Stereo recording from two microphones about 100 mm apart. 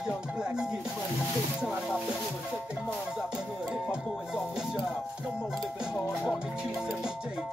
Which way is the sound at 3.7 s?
5° right (ahead or behind).